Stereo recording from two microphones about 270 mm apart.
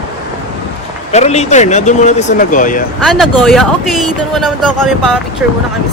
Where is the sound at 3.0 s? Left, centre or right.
Centre.